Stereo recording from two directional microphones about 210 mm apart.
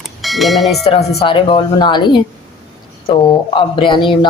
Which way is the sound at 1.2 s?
25° left (ahead or behind).